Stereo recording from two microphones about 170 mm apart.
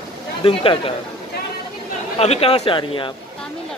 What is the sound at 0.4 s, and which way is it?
Speech, 30° left (ahead or behind).